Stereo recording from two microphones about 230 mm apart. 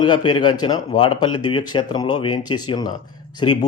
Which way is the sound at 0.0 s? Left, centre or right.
Centre.